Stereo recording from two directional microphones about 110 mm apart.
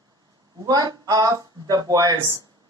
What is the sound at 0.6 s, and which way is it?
Speech, 35° right (ahead or behind).